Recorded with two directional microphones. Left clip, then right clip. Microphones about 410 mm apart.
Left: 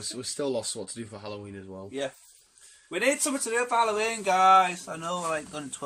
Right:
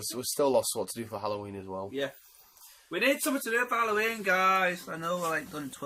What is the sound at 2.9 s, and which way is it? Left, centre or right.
Speech, centre.